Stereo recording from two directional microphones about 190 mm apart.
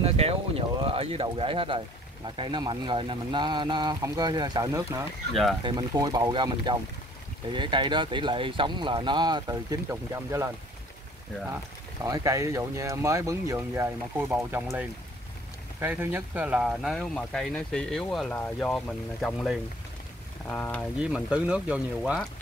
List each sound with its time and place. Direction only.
0.0 s speech: 30° right (ahead or behind)
5.3 s speech: centre (ahead or behind)
5.6 s speech: 25° right (ahead or behind)
15.8 s speech: 10° right (ahead or behind); by 20.9 s 5° left (ahead or behind)
21.0 s speech: 5° right (ahead or behind)